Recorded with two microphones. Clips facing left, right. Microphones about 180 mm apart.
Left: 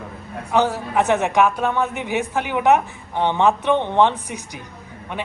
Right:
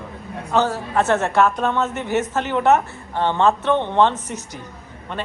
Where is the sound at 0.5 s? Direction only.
15° left (ahead or behind).